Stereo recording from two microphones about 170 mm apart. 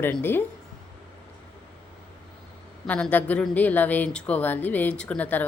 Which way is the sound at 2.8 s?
10° left (ahead or behind).